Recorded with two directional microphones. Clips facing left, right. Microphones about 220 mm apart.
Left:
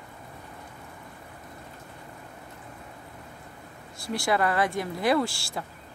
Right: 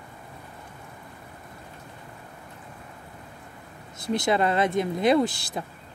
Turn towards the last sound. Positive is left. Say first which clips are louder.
# right 3 dB
turn(degrees=-20)  # may be behind; listen again after turning